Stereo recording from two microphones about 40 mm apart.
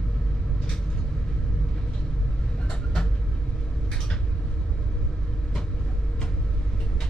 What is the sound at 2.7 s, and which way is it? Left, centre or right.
Vehicle, centre.